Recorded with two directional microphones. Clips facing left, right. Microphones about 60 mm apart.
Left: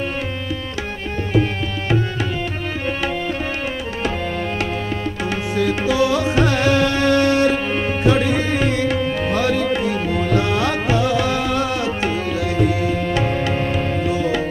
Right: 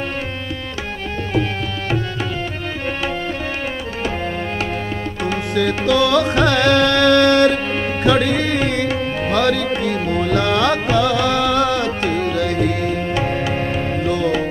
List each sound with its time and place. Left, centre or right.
5.5 s music: right
8.0 s tabla: right
9.3 s music: right
14.0 s music: right